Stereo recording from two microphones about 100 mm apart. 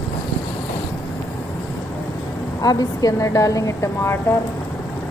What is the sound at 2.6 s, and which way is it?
A woman's voice, 35° left (ahead or behind).